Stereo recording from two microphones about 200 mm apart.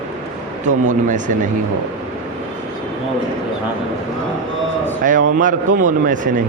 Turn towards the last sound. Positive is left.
turn(degrees=-40)  # may be behind; listen again after turning